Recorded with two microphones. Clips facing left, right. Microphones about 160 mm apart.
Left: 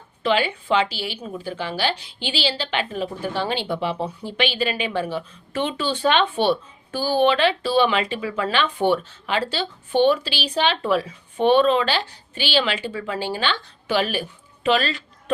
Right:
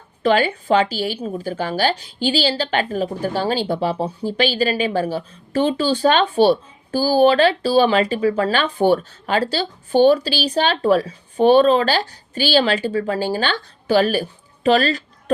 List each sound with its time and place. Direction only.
0.2 s a woman's voice: 45° right (ahead or behind)